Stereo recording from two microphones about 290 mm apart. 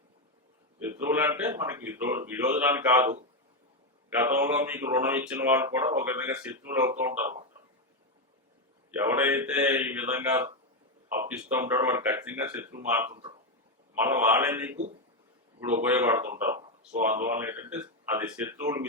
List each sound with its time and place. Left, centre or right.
0.9 s speech: centre
4.2 s speech: centre
8.9 s speech: centre
14.0 s speech: centre